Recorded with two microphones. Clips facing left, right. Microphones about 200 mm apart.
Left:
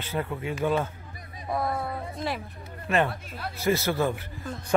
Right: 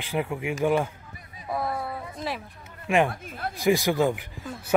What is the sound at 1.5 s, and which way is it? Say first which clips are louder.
Speech: left 1 dB; centre (ahead or behind).